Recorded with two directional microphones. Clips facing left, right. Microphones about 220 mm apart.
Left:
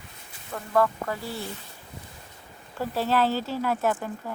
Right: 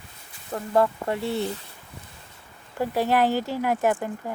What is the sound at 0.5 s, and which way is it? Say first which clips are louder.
Speech: right 2 dB; 25° right (ahead or behind).